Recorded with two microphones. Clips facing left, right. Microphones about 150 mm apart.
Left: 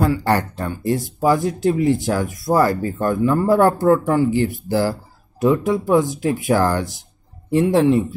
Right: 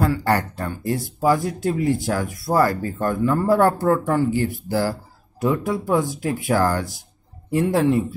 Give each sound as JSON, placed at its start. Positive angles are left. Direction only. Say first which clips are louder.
{"t": 0.0, "sound": "speech", "louder": "left 2 dB", "side_deg": 20}